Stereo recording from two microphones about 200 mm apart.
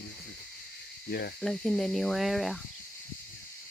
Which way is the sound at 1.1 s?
55° left (ahead or behind).